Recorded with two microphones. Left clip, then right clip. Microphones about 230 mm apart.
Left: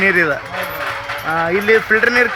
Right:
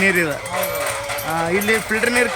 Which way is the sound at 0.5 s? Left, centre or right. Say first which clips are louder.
Even; right.